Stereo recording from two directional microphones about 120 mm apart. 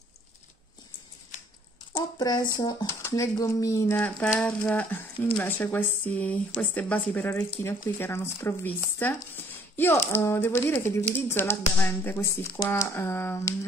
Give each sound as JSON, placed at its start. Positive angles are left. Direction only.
{"t": 2.0, "sound": "speech", "side_deg": 35}
{"t": 2.9, "sound": "speech", "side_deg": 20}